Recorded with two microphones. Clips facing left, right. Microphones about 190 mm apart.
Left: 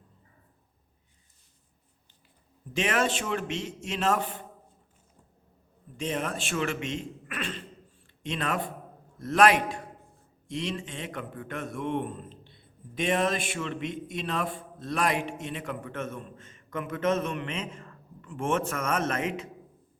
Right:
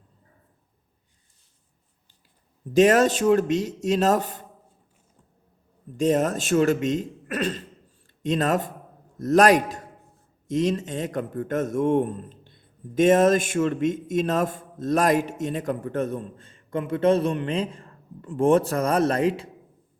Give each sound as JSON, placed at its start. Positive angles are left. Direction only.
{"t": 2.7, "sound": "a man's voice", "side_deg": -40}
{"t": 6.0, "sound": "a man's voice", "side_deg": -40}